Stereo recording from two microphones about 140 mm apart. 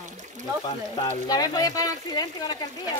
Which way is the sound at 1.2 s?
25° left (ahead or behind).